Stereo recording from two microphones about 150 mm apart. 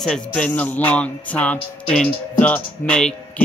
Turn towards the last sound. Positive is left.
turn(degrees=10)  # may be behind; listen again after turning